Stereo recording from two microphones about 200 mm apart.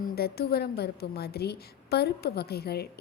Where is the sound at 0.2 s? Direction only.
50° left (ahead or behind).